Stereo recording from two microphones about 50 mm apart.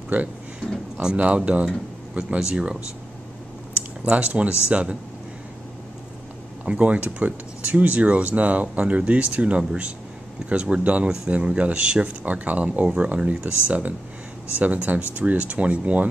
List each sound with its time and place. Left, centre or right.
0.1 s speech: right
1.1 s speech: right
1.7 s speech: centre
4.0 s speech: right
6.6 s speech: right